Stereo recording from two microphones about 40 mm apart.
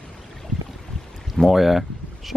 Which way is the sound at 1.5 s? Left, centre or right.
Centre.